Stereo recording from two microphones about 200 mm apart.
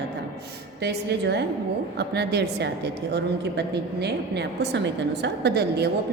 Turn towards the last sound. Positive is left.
turn(degrees=-55)  # may be behind; listen again after turning